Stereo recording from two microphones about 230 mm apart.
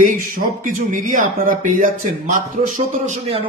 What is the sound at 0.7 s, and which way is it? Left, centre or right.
Speech, right.